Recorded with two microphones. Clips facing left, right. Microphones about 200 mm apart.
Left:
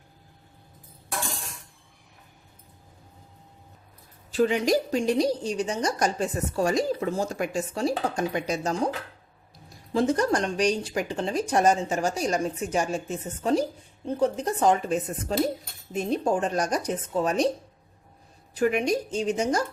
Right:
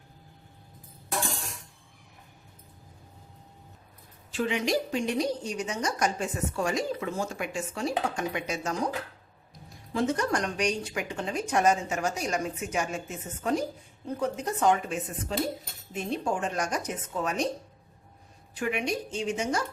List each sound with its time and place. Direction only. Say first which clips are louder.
4.3 s a woman's voice: left 6 dB; 40° left (ahead or behind)
9.9 s a woman's voice: left 4 dB; 35° left (ahead or behind)
18.5 s a woman's voice: left 6 dB; 40° left (ahead or behind)